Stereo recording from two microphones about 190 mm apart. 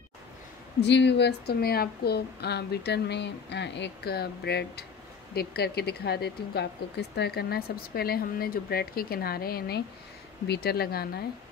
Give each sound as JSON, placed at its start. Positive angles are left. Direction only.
{"t": 0.7, "sound": "speech", "side_deg": 65}